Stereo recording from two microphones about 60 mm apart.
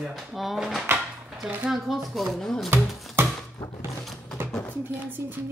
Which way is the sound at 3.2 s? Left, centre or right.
Right.